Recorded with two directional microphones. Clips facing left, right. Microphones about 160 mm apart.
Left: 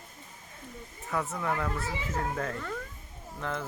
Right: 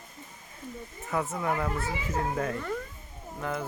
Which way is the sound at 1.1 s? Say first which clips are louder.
Right 2 dB; 20° right (ahead or behind).